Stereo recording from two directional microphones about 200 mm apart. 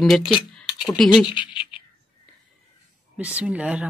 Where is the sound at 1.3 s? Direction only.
25° left (ahead or behind).